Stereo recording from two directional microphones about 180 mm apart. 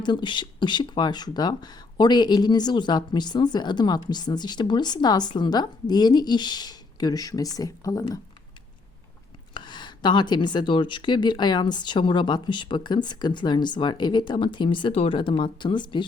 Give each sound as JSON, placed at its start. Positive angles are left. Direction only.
{"t": 0.0, "sound": "speech", "side_deg": 25}
{"t": 9.6, "sound": "speech", "side_deg": 25}